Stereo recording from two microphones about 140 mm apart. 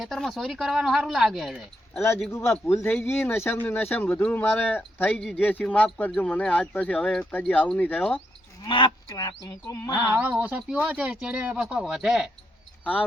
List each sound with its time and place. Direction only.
0.0 s speech: centre (ahead or behind)
2.8 s speech: 15° left (ahead or behind)
8.6 s speech: 35° left (ahead or behind)
10.2 s speech: 10° right (ahead or behind)
12.8 s speech: 10° left (ahead or behind)